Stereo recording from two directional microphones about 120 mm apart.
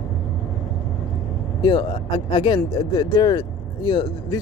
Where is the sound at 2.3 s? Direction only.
40° left (ahead or behind).